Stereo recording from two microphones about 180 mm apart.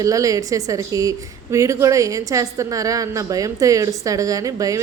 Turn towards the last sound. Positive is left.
turn(degrees=-20)  # may be behind; listen again after turning